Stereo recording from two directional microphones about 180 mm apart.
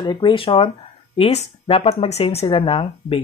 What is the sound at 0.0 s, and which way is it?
Speech, 25° left (ahead or behind).